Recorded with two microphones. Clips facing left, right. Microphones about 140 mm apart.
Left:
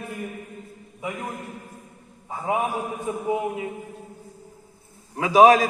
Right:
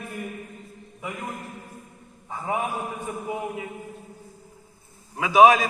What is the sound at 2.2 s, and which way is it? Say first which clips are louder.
A man's voice: left 3 dB; 20° left (ahead or behind).